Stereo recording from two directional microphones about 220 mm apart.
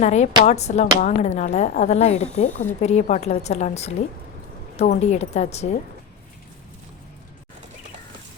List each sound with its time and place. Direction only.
0.0 s a woman's voice: 30° left (ahead or behind)